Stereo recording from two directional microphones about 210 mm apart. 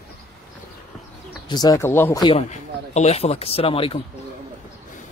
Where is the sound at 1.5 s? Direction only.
15° left (ahead or behind).